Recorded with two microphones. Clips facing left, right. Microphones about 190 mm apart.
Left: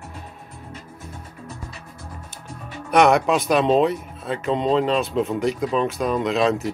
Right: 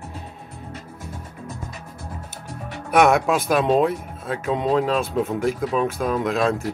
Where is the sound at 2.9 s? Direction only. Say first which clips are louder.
Left 1 dB; centre (ahead or behind).